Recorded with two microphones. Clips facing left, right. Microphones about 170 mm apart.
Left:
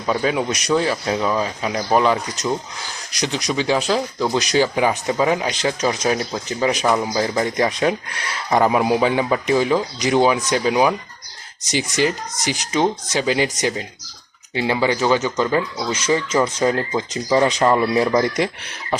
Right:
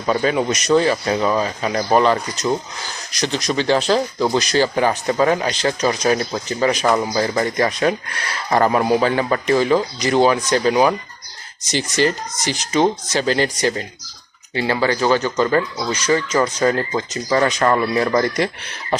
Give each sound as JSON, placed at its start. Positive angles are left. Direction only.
{"t": 0.0, "sound": "speech", "side_deg": 0}